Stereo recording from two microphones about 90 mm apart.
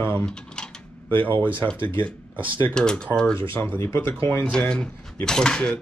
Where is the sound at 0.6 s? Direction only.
10° left (ahead or behind).